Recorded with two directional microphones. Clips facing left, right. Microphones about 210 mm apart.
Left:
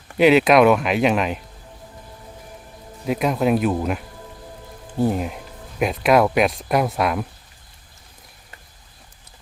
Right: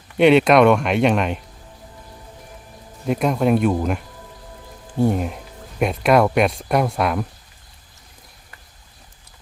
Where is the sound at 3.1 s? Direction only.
Centre (ahead or behind).